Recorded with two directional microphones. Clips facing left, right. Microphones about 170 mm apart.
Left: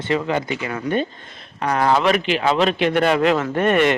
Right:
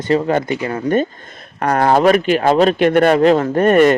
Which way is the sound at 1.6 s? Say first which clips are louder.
Right 5 dB; 55° right (ahead or behind).